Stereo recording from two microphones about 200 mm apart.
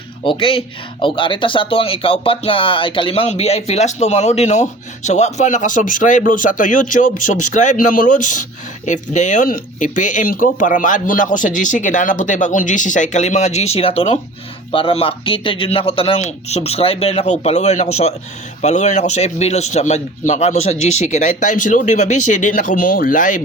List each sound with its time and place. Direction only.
0.3 s speech: 25° left (ahead or behind); by 23.4 s 40° left (ahead or behind)